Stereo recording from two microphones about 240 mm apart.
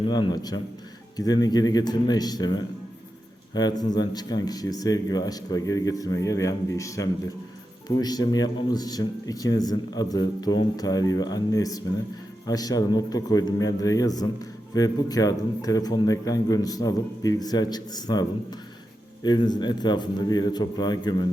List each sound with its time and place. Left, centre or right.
0.0 s speech: centre